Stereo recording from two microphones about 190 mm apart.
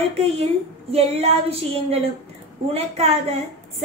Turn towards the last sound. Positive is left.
turn(degrees=-35)  # may be behind; listen again after turning